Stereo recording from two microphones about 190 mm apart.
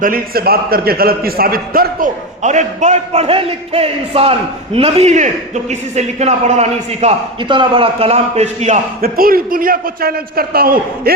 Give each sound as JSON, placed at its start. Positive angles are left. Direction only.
{"t": 0.0, "sound": "a man's voice", "side_deg": -50}